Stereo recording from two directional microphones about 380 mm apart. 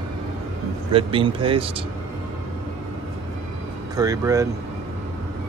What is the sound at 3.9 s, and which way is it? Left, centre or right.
Speech, centre.